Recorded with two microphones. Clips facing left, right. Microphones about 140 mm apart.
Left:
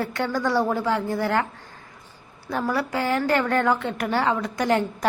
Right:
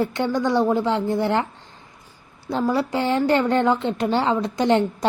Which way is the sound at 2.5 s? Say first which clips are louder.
Right 4 dB; 25° right (ahead or behind).